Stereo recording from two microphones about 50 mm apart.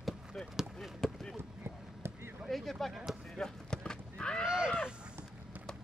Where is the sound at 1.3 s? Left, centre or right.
Right.